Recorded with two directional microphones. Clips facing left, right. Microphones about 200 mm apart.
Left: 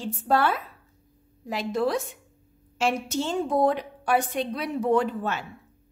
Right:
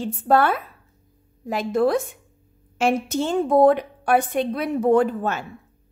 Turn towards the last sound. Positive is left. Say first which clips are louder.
# right 5 dB
turn(degrees=-50)  # may be behind; listen again after turning